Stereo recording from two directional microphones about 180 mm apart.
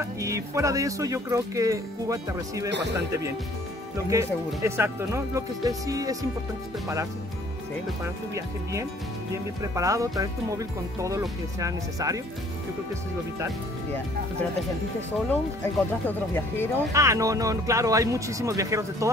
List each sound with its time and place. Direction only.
0.2 s speech: 15° right (ahead or behind)
4.1 s speech: 15° right (ahead or behind)
8.0 s speech: 15° right (ahead or behind)
9.6 s music: 20° right (ahead or behind)
11.0 s speech: 15° right (ahead or behind)
15.1 s speech: 10° left (ahead or behind)
16.9 s speech: 15° right (ahead or behind)